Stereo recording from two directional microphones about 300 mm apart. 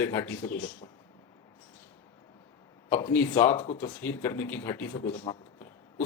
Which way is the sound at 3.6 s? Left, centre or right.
Centre.